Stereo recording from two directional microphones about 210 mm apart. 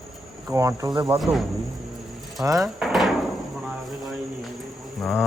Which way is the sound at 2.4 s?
15° right (ahead or behind).